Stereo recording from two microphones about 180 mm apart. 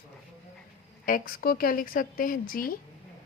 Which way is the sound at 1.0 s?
50° left (ahead or behind).